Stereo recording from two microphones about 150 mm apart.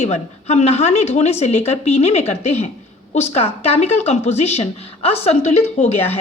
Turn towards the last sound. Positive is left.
turn(degrees=45)  # may be behind; listen again after turning